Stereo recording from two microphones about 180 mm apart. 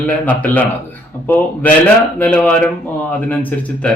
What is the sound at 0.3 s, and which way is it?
Speech, 10° left (ahead or behind).